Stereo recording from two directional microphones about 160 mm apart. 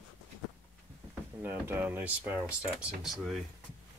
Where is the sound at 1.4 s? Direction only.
15° right (ahead or behind).